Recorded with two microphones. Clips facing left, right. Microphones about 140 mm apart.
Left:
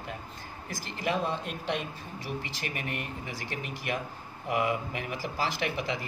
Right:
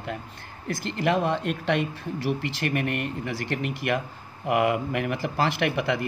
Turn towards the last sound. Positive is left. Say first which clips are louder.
# right 7 dB
turn(degrees=-65)  # may be behind; listen again after turning